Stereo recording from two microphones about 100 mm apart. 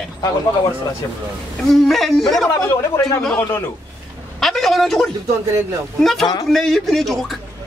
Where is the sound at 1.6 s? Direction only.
Centre (ahead or behind).